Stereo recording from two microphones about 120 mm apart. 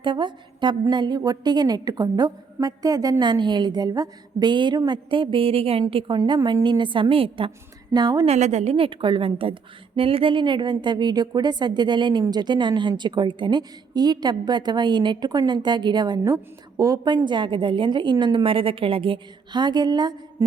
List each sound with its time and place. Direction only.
0.0 s a woman's voice: 40° right (ahead or behind)
7.9 s a woman's voice: 35° right (ahead or behind)
8.2 s a woman's voice: 65° right (ahead or behind); by 20.1 s 35° right (ahead or behind)